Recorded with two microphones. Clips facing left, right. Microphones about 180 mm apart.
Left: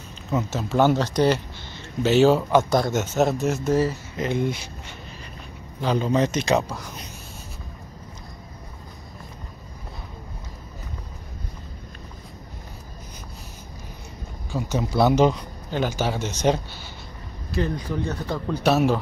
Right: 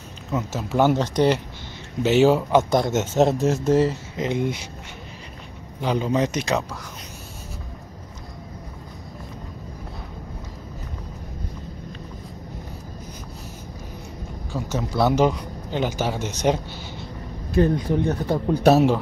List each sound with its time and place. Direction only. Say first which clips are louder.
0.3 s speech: left 1 dB; 5° right (ahead or behind)
5.8 s speech: even; 15° right (ahead or behind)
14.5 s speech: left 2 dB; 10° left (ahead or behind)
15.0 s speech: even; 5° right (ahead or behind)
17.8 s speech: right 5 dB; 20° right (ahead or behind)
18.5 s speech: right 5 dB; 50° right (ahead or behind)